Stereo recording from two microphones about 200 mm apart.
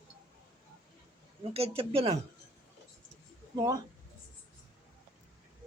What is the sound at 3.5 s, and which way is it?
Speech, 15° right (ahead or behind).